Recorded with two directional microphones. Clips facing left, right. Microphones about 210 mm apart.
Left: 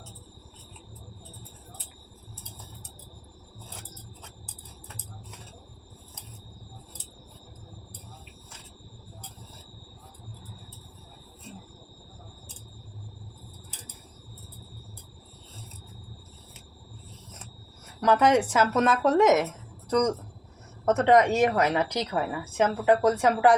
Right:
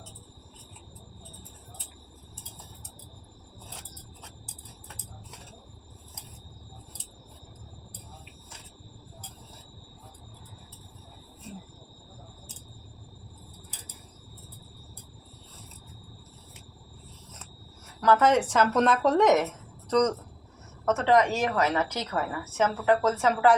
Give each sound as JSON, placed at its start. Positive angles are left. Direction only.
{"t": 18.0, "sound": "a woman's voice", "side_deg": 15}